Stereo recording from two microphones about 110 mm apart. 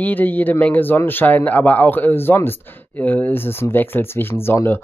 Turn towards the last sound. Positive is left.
turn(degrees=20)  # may be behind; listen again after turning